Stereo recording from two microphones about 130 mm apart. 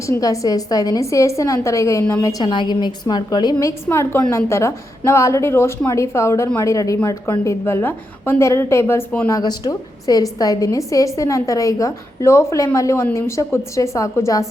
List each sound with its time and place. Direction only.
0.0 s a woman's voice: 25° left (ahead or behind)
2.4 s a woman's voice: 35° left (ahead or behind); by 9.3 s 15° left (ahead or behind)
9.3 s a woman's voice: 30° left (ahead or behind)